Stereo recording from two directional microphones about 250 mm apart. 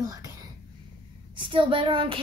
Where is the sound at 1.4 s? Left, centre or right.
Centre.